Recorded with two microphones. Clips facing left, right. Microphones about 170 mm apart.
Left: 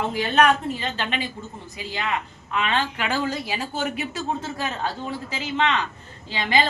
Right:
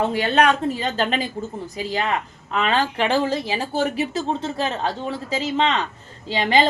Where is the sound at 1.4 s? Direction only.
40° right (ahead or behind).